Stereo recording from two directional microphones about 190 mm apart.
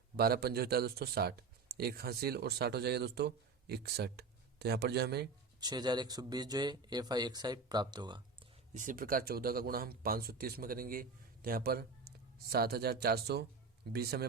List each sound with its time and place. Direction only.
0.2 s speech: 55° right (ahead or behind)
5.5 s speech: 20° right (ahead or behind)
8.7 s speech: 45° right (ahead or behind)